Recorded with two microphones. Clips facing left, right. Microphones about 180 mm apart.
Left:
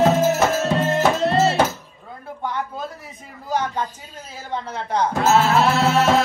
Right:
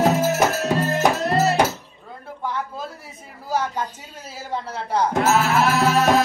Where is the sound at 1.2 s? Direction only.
25° left (ahead or behind).